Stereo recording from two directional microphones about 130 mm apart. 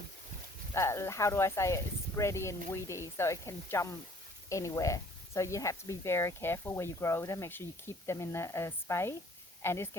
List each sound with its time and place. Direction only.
0.7 s speech: 20° left (ahead or behind)